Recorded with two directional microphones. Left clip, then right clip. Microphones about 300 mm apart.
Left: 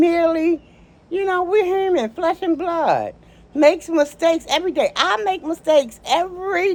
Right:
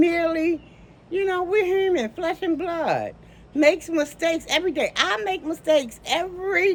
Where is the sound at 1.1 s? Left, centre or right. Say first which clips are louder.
Left 4 dB; centre.